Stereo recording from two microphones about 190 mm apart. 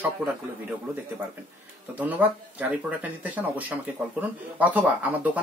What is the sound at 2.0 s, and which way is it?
Speech, 10° right (ahead or behind).